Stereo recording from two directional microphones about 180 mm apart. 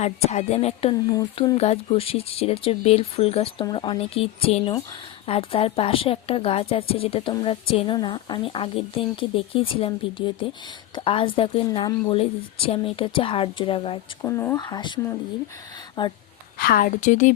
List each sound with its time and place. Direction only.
0.0 s a woman's voice: 40° left (ahead or behind)
14.2 s a woman's voice: 15° left (ahead or behind)
16.6 s a woman's voice: 55° left (ahead or behind)